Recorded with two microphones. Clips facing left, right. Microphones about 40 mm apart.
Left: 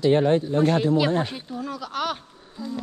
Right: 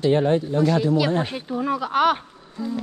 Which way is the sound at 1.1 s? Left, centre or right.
Right.